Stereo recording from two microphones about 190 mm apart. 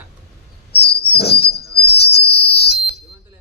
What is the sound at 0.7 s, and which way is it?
Whistle, 60° left (ahead or behind).